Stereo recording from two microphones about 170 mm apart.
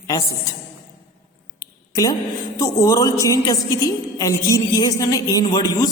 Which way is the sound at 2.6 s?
20° left (ahead or behind).